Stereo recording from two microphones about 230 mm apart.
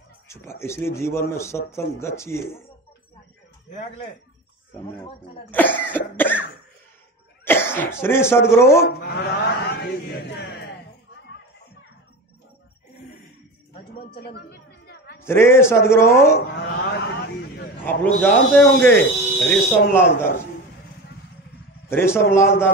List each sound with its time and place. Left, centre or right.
0.3 s speech: centre
5.5 s speech: centre
7.4 s cough: centre
8.0 s speech: centre
8.8 s a sound: left
14.2 s a sound: left
15.1 s speech: centre
16.3 s a sound: left
17.8 s speech: centre
21.8 s a man's voice: centre